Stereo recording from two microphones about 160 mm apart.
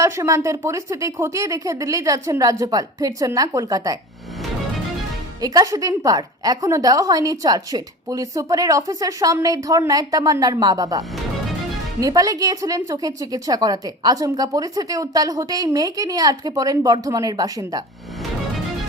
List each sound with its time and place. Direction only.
0.0 s a woman's voice: 20° right (ahead or behind)
5.4 s a woman's voice: 20° right (ahead or behind)